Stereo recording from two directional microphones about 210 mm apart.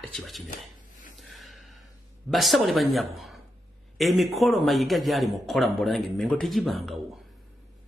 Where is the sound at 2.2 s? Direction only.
Centre (ahead or behind).